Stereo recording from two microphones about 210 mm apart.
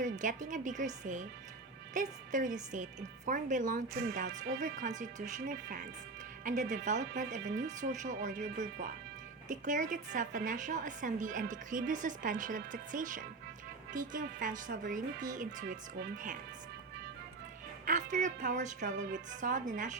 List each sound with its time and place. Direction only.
0.0 s a woman's voice: 35° right (ahead or behind)
17.8 s a woman's voice: 35° right (ahead or behind)